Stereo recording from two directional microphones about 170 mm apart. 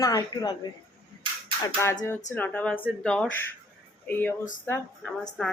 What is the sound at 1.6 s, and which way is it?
A woman's voice, 15° left (ahead or behind).